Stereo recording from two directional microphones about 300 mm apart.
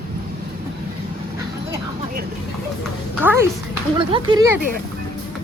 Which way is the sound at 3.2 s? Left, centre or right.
Centre.